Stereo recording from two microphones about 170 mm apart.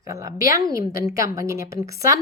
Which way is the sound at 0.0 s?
20° right (ahead or behind).